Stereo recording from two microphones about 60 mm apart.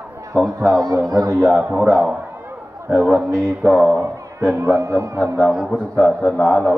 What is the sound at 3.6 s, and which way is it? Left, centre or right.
Speech, centre.